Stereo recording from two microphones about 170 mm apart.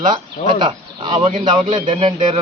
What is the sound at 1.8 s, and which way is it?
Speech, 40° right (ahead or behind).